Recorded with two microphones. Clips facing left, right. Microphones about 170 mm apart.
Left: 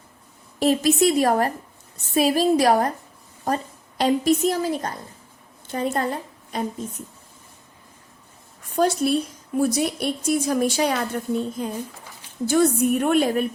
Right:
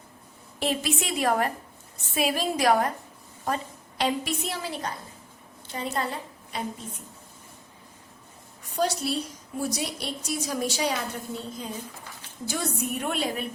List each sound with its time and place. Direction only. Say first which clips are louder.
0.6 s a woman's voice: left 10 dB; 40° left (ahead or behind)
8.7 s a woman's voice: left 7 dB; 55° left (ahead or behind)